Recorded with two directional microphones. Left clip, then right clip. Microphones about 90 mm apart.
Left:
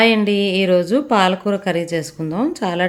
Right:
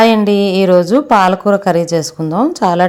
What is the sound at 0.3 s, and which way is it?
A woman's voice, 65° right (ahead or behind).